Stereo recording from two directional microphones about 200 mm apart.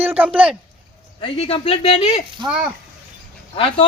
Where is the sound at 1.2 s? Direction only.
30° left (ahead or behind).